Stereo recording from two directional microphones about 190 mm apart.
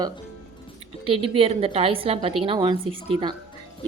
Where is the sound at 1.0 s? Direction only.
30° right (ahead or behind).